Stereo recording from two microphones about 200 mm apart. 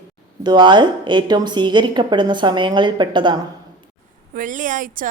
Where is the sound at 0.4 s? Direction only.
25° right (ahead or behind).